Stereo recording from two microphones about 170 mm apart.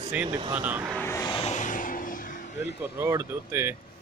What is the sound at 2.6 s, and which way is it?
Speech, 15° right (ahead or behind).